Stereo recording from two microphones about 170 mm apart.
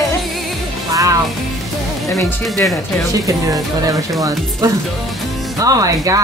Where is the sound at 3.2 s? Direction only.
20° right (ahead or behind).